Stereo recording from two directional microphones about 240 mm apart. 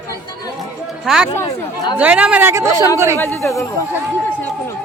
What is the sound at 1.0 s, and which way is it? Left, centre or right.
Speech, centre.